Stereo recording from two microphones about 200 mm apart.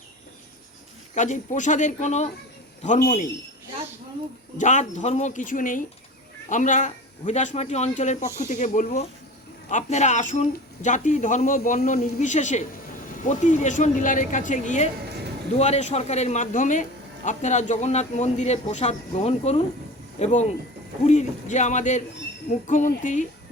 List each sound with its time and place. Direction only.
1.1 s a man's voice: 40° left (ahead or behind)
4.5 s a man's voice: 40° left (ahead or behind)